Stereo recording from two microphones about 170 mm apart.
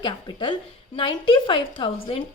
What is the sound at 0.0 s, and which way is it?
A woman's voice, 30° left (ahead or behind).